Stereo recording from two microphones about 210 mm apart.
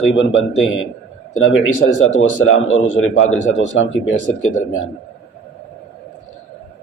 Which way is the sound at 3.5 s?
60° left (ahead or behind).